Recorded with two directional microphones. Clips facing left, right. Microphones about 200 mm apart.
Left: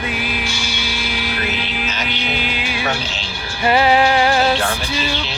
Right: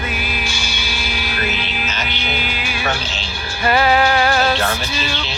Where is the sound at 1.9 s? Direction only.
15° left (ahead or behind).